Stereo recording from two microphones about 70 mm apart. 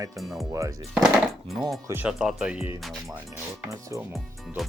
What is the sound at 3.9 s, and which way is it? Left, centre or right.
Speech, right.